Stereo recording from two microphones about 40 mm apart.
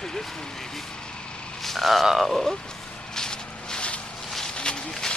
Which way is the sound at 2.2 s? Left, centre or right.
Centre.